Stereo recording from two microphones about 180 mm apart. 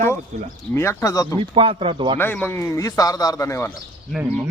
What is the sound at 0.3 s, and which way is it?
Speech, 40° right (ahead or behind).